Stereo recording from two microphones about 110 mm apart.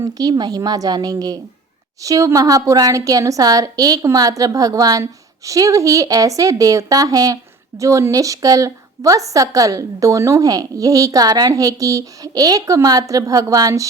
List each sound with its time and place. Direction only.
0.0 s a woman's voice: 35° right (ahead or behind)